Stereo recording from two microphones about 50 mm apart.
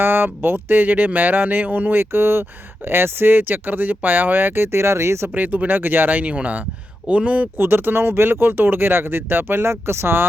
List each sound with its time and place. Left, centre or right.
0.0 s speech: right
5.3 s speech: right
6.2 s speech: right
7.6 s speech: right